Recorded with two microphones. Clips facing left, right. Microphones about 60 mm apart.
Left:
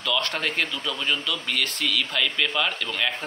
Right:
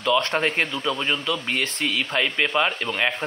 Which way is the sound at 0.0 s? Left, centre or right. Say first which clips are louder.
Right 5 dB; right.